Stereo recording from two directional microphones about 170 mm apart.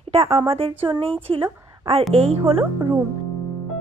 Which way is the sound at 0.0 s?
35° right (ahead or behind).